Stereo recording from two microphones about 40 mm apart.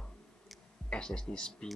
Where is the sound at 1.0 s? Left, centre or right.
Centre.